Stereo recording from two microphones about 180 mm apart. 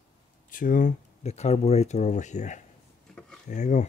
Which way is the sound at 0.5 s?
45° left (ahead or behind).